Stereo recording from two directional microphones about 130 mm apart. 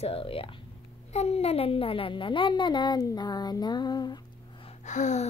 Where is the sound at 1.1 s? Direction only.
55° left (ahead or behind); by 4.1 s 35° left (ahead or behind).